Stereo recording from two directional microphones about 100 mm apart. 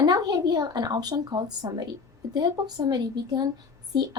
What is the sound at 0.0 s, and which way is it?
A woman's voice, 40° right (ahead or behind).